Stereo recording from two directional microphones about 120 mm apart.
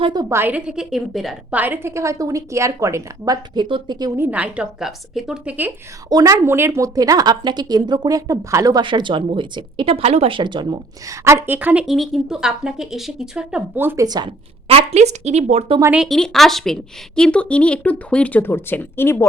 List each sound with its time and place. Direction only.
0.0 s a woman's voice: 35° right (ahead or behind)
0.3 s a woman's voice: 20° right (ahead or behind); by 1.5 s centre (ahead or behind)
1.5 s a woman's voice: 15° right (ahead or behind); by 4.1 s 35° right (ahead or behind)
4.2 s a woman's voice: 10° right (ahead or behind)
6.1 s a woman's voice: 30° right (ahead or behind)
8.8 s a woman's voice: 40° right (ahead or behind); by 13.6 s 5° right (ahead or behind)
13.7 s a woman's voice: 20° right (ahead or behind)
14.3 s speech: 55° right (ahead or behind)
16.0 s speech: 5° left (ahead or behind); by 19.3 s 20° left (ahead or behind)